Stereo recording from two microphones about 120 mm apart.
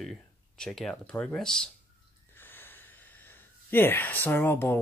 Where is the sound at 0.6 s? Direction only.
5° left (ahead or behind).